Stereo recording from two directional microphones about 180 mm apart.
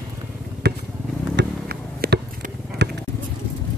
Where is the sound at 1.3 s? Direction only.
65° right (ahead or behind).